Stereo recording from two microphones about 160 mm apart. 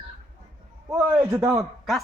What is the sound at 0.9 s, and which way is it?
Speech, 20° right (ahead or behind).